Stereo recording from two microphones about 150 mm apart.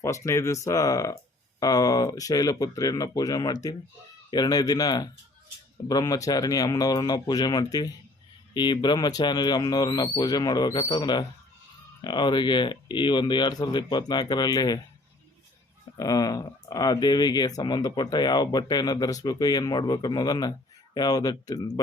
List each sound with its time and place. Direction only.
0.0 s speech: 20° left (ahead or behind)
16.0 s speech: 25° left (ahead or behind)